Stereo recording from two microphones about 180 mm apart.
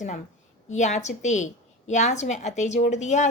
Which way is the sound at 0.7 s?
40° left (ahead or behind).